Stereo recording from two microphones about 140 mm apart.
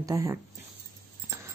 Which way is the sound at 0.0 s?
25° right (ahead or behind).